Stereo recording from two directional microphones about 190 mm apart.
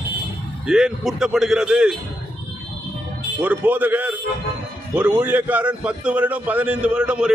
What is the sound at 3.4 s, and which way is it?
A man's voice, 10° right (ahead or behind).